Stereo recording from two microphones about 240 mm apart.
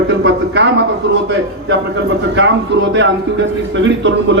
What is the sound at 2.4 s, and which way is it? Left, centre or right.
A man's voice, right.